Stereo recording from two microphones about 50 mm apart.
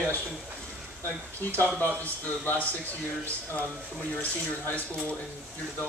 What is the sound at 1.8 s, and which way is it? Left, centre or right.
Speech, left.